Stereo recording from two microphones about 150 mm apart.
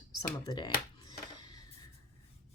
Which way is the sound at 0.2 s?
30° left (ahead or behind).